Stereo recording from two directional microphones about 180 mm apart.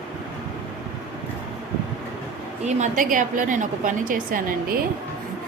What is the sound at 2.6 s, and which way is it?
A woman's voice, 45° right (ahead or behind).